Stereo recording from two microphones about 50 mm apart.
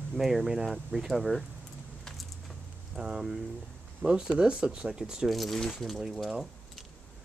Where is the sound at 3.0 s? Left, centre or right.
Centre.